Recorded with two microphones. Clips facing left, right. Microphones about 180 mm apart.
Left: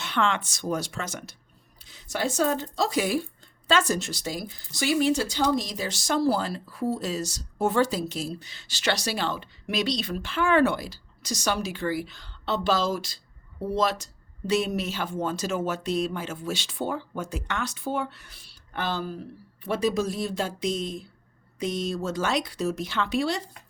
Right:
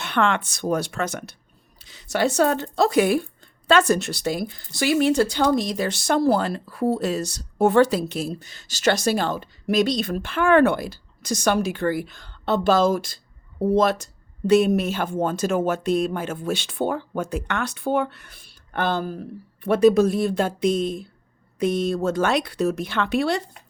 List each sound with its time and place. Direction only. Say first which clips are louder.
0.0 s speech: right 4 dB; 60° right (ahead or behind)
1.8 s speech: right 7 dB; 75° right (ahead or behind)